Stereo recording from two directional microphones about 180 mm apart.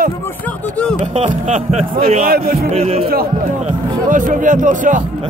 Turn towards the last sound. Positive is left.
turn(degrees=-45)  # may be behind; listen again after turning